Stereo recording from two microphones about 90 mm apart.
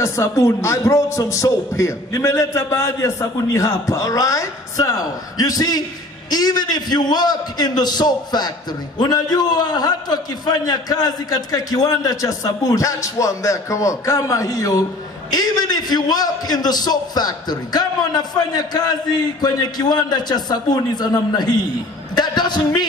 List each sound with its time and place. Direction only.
0.0 s a man's voice: 35° left (ahead or behind); by 22.6 s 50° left (ahead or behind)